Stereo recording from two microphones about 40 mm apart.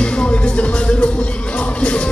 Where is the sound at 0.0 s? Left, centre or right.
Left.